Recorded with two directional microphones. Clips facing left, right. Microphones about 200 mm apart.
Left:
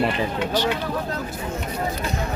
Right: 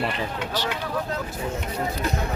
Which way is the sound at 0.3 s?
20° left (ahead or behind).